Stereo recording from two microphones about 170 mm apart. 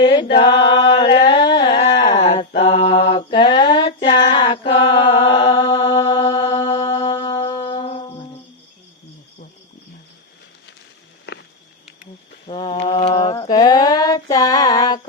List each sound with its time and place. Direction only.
0.0 s a sound: 25° left (ahead or behind)
0.3 s singing: 25° left (ahead or behind)
2.6 s mantra: 35° left (ahead or behind)
3.8 s a sound: 30° left (ahead or behind)
5.9 s mantra: 20° left (ahead or behind)
6.1 s mantra: 30° left (ahead or behind)
7.0 s music: 25° left (ahead or behind)
12.5 s mantra: 30° left (ahead or behind)
13.3 s a sound: 20° left (ahead or behind)